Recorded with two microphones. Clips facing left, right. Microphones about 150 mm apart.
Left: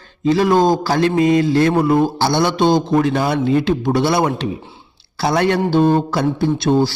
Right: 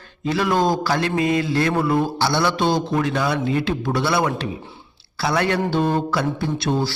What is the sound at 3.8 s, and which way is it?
Mantra, 25° left (ahead or behind).